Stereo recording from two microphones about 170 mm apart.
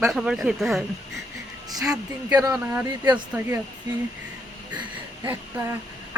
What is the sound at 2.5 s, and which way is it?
Speech, 10° right (ahead or behind).